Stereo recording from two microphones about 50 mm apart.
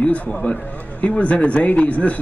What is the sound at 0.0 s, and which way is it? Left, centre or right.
A man's voice, left.